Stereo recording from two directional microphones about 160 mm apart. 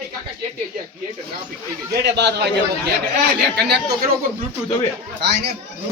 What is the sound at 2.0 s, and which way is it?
Speech, 90° right.